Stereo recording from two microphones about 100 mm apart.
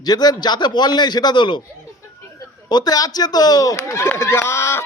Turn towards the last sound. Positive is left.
turn(degrees=25)  # may be behind; listen again after turning